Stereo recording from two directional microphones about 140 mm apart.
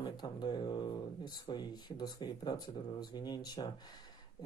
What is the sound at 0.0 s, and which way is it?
Speech, 30° left (ahead or behind).